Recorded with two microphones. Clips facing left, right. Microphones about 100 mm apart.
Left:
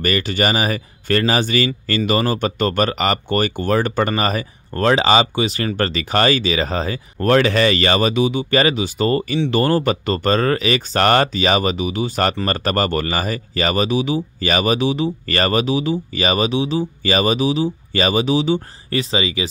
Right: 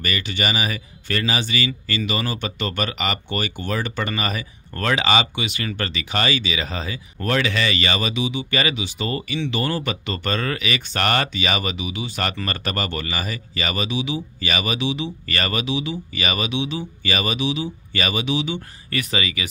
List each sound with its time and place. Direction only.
0.0 s speech: 45° left (ahead or behind); by 19.4 s 25° left (ahead or behind)